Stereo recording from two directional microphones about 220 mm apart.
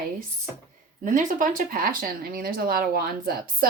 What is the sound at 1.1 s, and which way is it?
Speech, 35° right (ahead or behind).